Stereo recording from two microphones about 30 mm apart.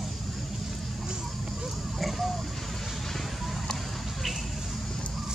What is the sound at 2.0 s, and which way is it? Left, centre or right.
Vehicle, centre.